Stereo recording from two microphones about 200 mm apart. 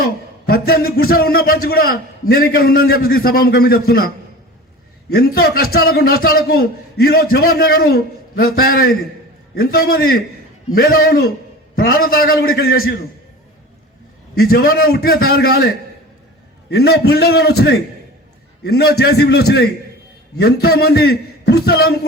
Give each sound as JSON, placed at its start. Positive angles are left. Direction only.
{"t": 0.0, "sound": "a man's voice", "side_deg": 50}
{"t": 14.3, "sound": "a man's voice", "side_deg": 50}